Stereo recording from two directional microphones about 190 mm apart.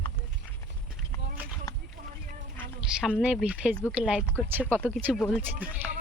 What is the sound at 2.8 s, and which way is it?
Speech, 5° right (ahead or behind).